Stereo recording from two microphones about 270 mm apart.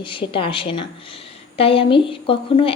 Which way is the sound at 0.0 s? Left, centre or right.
Centre.